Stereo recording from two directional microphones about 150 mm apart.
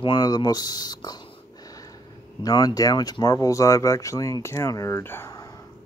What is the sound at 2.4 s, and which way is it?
Speech, 25° left (ahead or behind).